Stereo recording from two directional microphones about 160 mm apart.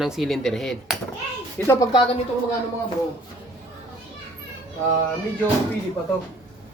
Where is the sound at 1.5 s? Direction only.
15° left (ahead or behind).